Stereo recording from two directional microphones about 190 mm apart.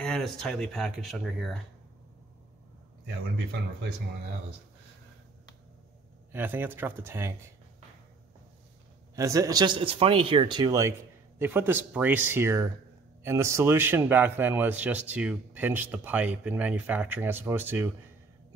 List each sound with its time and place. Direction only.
0.0 s speech: 5° left (ahead or behind)
6.3 s a man's voice: 10° right (ahead or behind)
9.1 s a man's voice: 15° right (ahead or behind)